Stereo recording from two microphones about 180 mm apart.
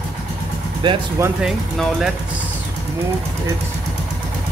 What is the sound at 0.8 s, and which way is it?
Speech, 25° right (ahead or behind).